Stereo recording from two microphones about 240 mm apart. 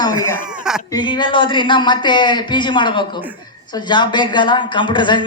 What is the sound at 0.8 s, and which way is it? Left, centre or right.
Speech, centre.